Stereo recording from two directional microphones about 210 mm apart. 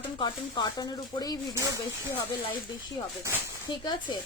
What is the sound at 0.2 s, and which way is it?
Speech, 20° left (ahead or behind).